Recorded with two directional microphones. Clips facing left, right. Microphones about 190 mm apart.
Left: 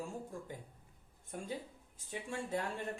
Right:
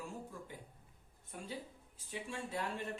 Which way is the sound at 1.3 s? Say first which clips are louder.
Left 3 dB; 45° left (ahead or behind).